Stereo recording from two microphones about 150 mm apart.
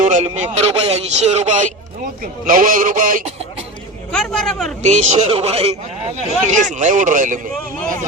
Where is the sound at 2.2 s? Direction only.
65° right (ahead or behind).